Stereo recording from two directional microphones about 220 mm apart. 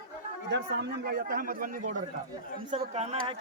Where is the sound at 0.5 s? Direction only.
50° right (ahead or behind).